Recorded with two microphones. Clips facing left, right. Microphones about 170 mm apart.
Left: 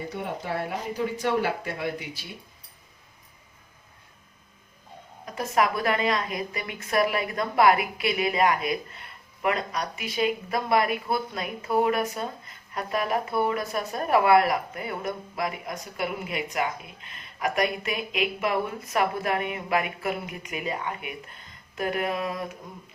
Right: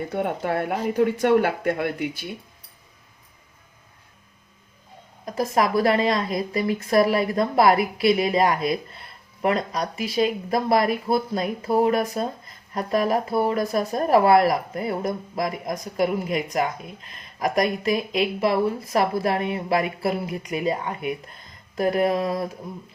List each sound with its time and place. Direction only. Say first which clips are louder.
0.1 s speech: right 8 dB; 55° right (ahead or behind)
5.2 s a woman's voice: right 3 dB; 35° right (ahead or behind)